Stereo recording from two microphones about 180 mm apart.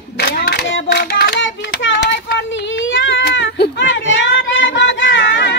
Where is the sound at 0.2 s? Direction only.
60° left (ahead or behind).